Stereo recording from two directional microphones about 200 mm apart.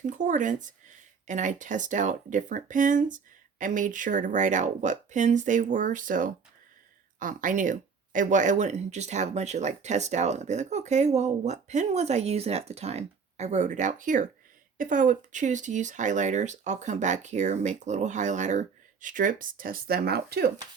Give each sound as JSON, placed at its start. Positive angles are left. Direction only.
{"t": 0.0, "sound": "speech", "side_deg": -40}